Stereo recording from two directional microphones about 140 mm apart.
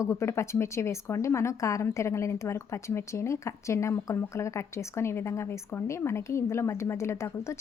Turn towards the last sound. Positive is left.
turn(degrees=20)  # may be behind; listen again after turning